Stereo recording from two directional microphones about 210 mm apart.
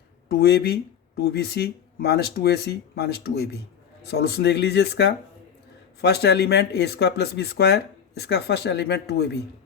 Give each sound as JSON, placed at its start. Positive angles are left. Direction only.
{"t": 0.3, "sound": "speech", "side_deg": 50}